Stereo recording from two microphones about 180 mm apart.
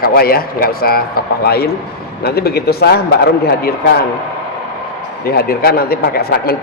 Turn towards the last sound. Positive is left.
turn(degrees=55)  # may be behind; listen again after turning